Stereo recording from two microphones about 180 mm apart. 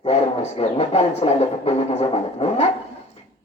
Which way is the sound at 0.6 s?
35° left (ahead or behind).